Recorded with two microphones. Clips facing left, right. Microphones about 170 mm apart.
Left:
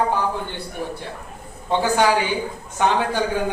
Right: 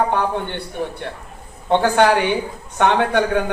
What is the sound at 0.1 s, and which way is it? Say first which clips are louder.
Speech: right 3 dB; 65° right (ahead or behind).